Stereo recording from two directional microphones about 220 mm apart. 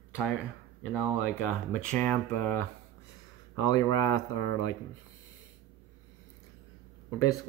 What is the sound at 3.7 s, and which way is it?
Speech, 15° left (ahead or behind).